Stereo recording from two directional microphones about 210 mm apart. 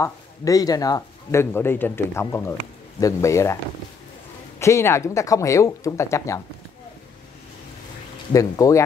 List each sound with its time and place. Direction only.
0.0 s speech: 15° left (ahead or behind)
4.6 s speech: 15° left (ahead or behind)
8.3 s speech: 15° left (ahead or behind)